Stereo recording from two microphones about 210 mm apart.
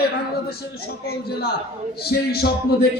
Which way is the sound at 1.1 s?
50° left (ahead or behind).